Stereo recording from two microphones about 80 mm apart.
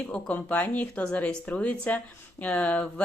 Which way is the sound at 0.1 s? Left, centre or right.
Centre.